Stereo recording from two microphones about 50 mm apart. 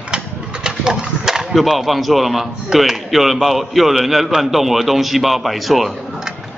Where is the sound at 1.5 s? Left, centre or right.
Centre.